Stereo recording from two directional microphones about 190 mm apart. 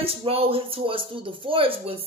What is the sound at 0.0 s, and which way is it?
A woman's voice, 30° right (ahead or behind).